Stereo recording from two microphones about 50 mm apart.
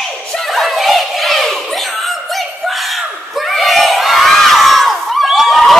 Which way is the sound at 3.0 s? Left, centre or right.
Centre.